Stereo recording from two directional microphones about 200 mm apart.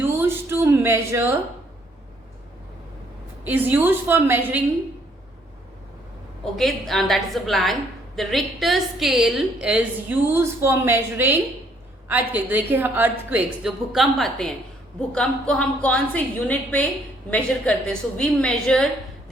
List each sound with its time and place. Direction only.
0.0 s a sound: 10° right (ahead or behind)
3.4 s a woman's voice: 10° right (ahead or behind)
6.4 s a woman's voice: centre (ahead or behind)